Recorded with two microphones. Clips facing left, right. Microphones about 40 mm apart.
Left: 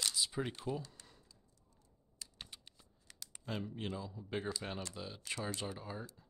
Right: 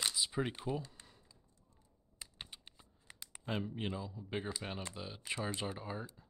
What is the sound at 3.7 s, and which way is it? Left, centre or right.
A man's voice, centre.